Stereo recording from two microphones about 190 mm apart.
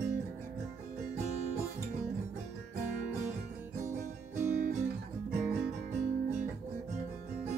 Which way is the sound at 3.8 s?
40° right (ahead or behind).